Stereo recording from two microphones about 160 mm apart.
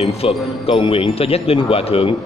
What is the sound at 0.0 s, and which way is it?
Speech, 35° left (ahead or behind).